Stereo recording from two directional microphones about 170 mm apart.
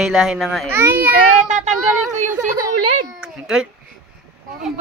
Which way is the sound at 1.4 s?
45° right (ahead or behind).